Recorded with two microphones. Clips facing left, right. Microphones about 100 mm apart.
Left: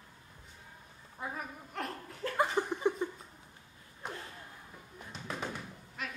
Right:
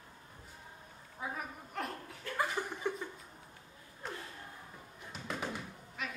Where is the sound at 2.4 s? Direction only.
20° left (ahead or behind).